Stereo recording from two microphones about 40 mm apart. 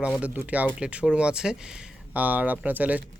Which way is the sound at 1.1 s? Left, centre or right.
Right.